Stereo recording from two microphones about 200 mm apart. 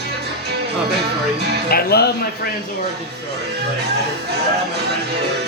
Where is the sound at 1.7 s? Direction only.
55° left (ahead or behind).